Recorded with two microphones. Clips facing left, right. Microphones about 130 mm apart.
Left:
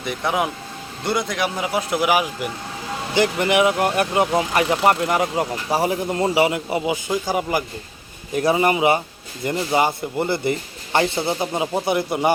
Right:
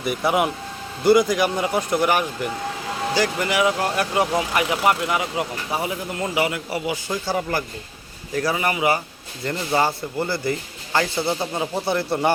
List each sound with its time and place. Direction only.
0.0 s speech: 5° right (ahead or behind)
3.2 s speech: 20° left (ahead or behind)
4.9 s speech: 40° left (ahead or behind)
6.3 s speech: 25° left (ahead or behind)